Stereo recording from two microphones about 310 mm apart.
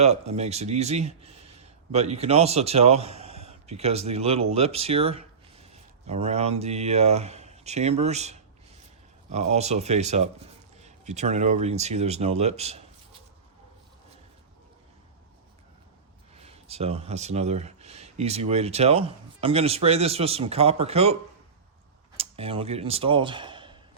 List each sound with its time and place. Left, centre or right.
0.0 s a man's voice: right
16.4 s speech: centre
22.2 s speech: centre